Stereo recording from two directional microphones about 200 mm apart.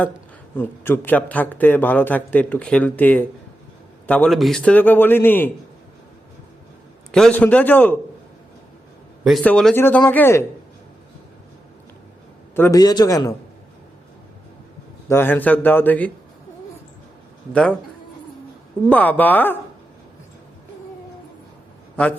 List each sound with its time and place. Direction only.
0.5 s a man's voice: 10° left (ahead or behind)
7.1 s a man's voice: 5° left (ahead or behind)
9.2 s a man's voice: 5° left (ahead or behind)
12.5 s a man's voice: 15° left (ahead or behind)
15.1 s a man's voice: 10° left (ahead or behind)
17.5 s speech: 5° left (ahead or behind)
18.9 s a man's voice: 10° left (ahead or behind)
21.9 s a man's voice: 5° left (ahead or behind)